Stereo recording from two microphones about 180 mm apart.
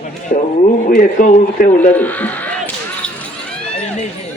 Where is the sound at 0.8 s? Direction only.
50° left (ahead or behind).